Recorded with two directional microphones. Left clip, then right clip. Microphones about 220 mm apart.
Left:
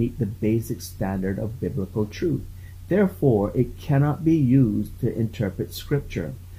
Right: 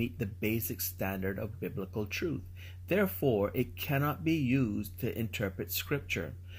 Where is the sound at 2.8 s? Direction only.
35° right (ahead or behind).